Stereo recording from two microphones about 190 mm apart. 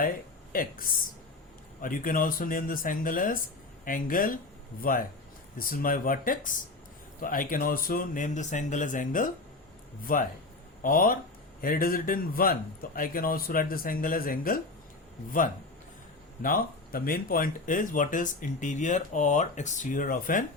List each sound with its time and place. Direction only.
0.5 s speech: 45° left (ahead or behind)
16.4 s speech: 50° left (ahead or behind)